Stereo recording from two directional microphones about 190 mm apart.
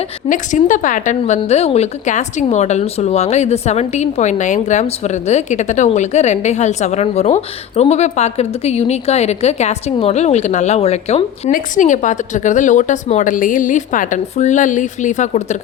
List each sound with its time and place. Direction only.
0.3 s a woman's voice: 40° left (ahead or behind)